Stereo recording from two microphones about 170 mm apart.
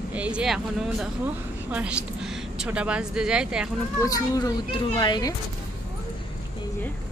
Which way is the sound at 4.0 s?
20° left (ahead or behind).